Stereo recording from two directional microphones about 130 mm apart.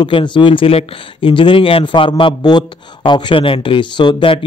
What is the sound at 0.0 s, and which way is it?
A man's voice, 35° left (ahead or behind).